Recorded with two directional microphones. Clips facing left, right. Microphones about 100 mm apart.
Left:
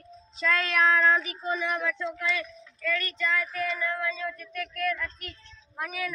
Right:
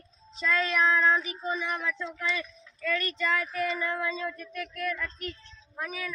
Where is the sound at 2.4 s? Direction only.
15° right (ahead or behind).